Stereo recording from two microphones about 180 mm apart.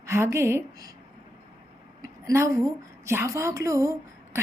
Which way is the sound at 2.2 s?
15° right (ahead or behind).